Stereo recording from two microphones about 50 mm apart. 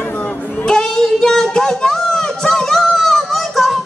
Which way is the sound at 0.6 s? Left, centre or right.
Centre.